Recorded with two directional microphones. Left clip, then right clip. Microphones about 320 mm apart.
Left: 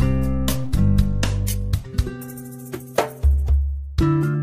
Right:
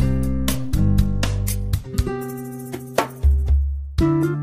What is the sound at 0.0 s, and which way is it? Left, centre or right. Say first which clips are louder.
Music: even; centre.